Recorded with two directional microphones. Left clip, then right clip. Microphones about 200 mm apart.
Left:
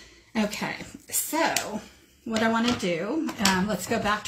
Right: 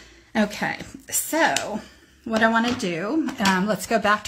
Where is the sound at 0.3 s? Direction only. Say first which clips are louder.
Right 5 dB; 55° right (ahead or behind).